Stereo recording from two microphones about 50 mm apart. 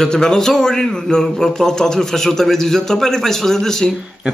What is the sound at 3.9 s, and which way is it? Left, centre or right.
Speech, centre.